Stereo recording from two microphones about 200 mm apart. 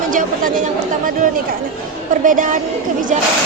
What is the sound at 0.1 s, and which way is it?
A woman's voice, 40° right (ahead or behind).